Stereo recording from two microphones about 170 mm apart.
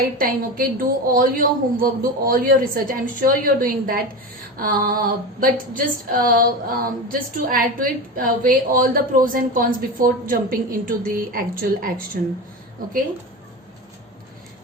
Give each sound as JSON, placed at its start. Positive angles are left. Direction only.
{"t": 0.2, "sound": "female singing", "side_deg": -55}